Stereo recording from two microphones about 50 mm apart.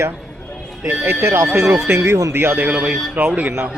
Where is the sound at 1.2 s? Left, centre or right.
Right.